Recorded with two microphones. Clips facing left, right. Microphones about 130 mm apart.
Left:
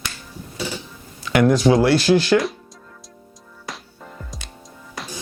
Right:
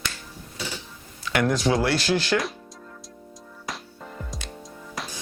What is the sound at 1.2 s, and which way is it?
Speech, 15° left (ahead or behind).